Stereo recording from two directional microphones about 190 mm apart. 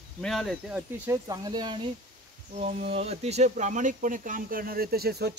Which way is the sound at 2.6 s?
35° right (ahead or behind).